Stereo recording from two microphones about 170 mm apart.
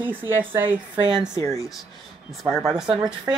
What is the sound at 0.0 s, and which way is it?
Speech, 10° right (ahead or behind).